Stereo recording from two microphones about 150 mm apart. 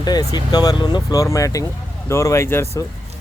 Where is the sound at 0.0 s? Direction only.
25° left (ahead or behind).